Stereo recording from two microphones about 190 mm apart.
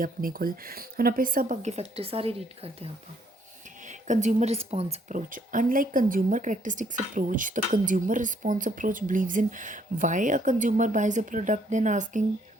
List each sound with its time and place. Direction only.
0.0 s a woman's voice: 50° right (ahead or behind)